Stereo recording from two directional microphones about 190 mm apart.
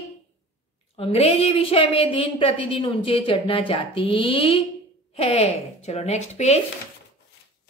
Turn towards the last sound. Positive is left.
turn(degrees=35)  # may be behind; listen again after turning